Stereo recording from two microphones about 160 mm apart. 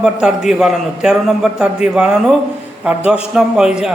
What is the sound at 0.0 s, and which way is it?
A man's voice, 5° right (ahead or behind).